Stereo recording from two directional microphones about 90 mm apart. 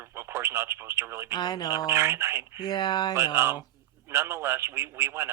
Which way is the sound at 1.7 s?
30° right (ahead or behind).